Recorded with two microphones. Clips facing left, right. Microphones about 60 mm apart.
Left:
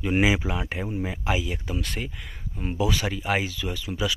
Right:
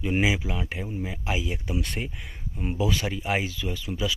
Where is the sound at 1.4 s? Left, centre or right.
Centre.